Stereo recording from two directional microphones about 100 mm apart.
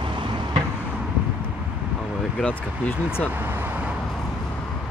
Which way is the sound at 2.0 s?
Centre (ahead or behind).